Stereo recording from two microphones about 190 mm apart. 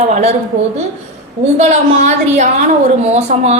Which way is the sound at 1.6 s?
35° right (ahead or behind).